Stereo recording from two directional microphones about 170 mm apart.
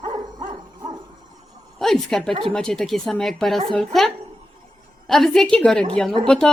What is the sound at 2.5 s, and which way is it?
Speech, 5° left (ahead or behind).